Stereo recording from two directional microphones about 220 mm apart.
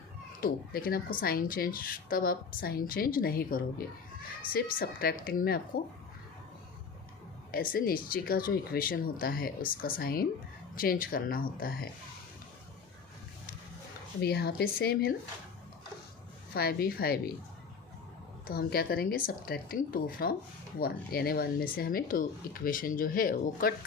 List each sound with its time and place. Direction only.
0.4 s speech: 40° left (ahead or behind)
7.5 s speech: 40° left (ahead or behind)
14.2 s speech: 45° left (ahead or behind)
16.6 s speech: 45° left (ahead or behind)
18.4 s speech: 45° left (ahead or behind)